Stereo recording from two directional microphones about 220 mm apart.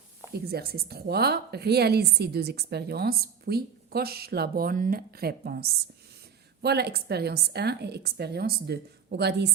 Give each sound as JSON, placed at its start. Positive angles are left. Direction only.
{"t": 0.3, "sound": "a woman's voice", "side_deg": -45}